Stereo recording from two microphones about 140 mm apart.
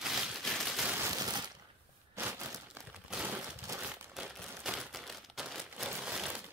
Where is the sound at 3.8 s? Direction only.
10° right (ahead or behind).